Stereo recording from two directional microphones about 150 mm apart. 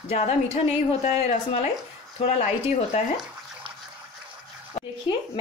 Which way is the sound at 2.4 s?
50° left (ahead or behind).